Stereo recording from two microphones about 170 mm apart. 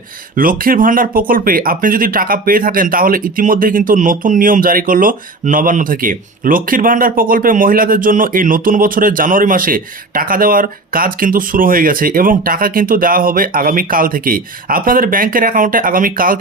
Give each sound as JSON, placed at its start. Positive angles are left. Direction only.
{"t": 0.3, "sound": "speech", "side_deg": -55}